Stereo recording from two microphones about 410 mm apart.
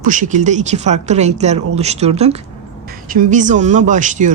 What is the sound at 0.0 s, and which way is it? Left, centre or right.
Speech, centre.